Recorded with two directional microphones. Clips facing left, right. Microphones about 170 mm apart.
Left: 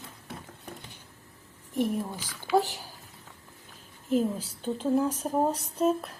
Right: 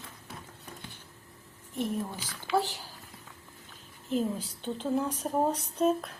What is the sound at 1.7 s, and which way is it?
A woman's voice, 10° left (ahead or behind).